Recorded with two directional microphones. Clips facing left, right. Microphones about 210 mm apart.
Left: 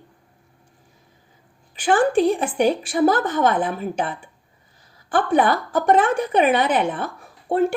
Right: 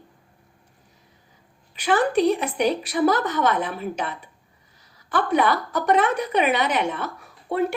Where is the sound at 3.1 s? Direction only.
50° left (ahead or behind).